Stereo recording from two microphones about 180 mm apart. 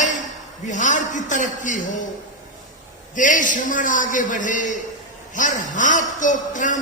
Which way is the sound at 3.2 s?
45° left (ahead or behind).